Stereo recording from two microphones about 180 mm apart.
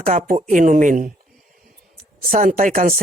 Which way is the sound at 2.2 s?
45° right (ahead or behind).